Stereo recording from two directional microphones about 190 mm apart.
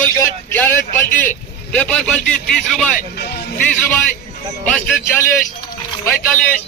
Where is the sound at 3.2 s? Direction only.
60° left (ahead or behind).